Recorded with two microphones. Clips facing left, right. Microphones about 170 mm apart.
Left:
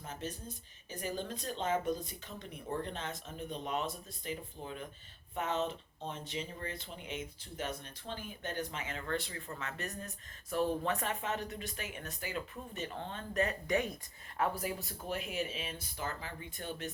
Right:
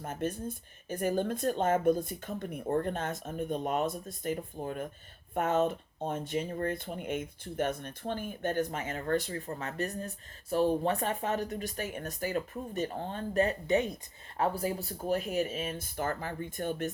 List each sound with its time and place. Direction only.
0.0 s speech: 55° right (ahead or behind)